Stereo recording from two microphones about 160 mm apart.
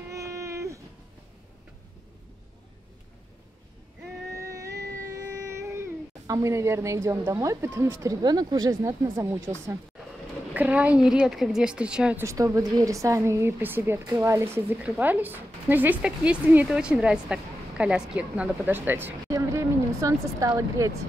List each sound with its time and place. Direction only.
0.1 s a sound: 20° right (ahead or behind)
4.4 s cat: 20° right (ahead or behind)
10.5 s a woman's voice: 10° right (ahead or behind)
12.3 s a woman's voice: 20° right (ahead or behind)